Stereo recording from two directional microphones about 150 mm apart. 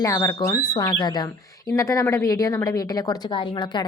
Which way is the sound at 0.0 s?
20° left (ahead or behind).